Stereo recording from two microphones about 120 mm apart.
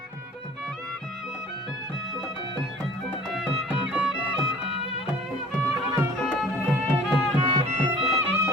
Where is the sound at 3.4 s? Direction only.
5° right (ahead or behind).